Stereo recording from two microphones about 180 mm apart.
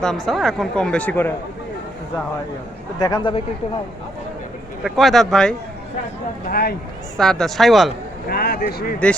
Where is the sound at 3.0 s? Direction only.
25° left (ahead or behind).